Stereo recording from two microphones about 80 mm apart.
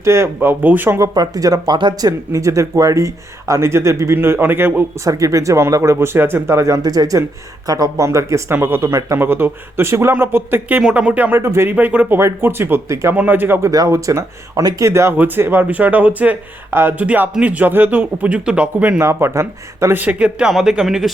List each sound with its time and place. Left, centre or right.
0.0 s speech: right
0.4 s speech: right
1.1 s speech: right
1.7 s speech: right
5.0 s speech: right
6.1 s speech: right
8.9 s speech: right
9.1 s speech: right
13.1 s speech: right
13.6 s speech: right
14.8 s speech: right; by 18.9 s centre
18.9 s speech: right
20.0 s a man's voice: centre